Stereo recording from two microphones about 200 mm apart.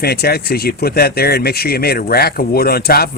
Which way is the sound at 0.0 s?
50° left (ahead or behind).